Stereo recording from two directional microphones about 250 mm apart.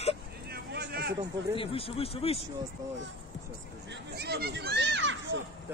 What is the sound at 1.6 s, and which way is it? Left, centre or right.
Speech, left.